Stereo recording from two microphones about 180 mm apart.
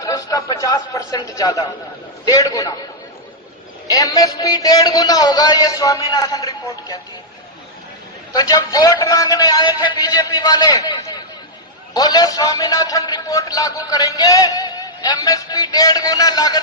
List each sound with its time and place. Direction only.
0.0 s a man's voice: 20° left (ahead or behind)
3.8 s a man's voice: 20° left (ahead or behind)
8.3 s a man's voice: 20° left (ahead or behind)